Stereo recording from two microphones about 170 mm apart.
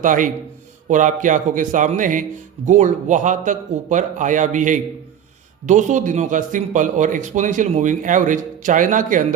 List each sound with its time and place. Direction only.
0.0 s a man's voice: 50° right (ahead or behind)